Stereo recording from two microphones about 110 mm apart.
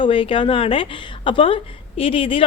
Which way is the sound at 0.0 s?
55° left (ahead or behind).